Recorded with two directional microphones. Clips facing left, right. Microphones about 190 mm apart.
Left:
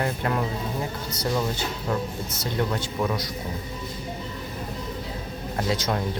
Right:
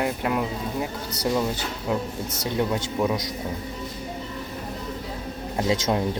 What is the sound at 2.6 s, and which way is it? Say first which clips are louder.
Speech: right 2 dB; 15° right (ahead or behind).